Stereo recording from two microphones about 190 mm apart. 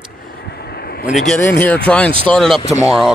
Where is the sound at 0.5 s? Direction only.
55° left (ahead or behind).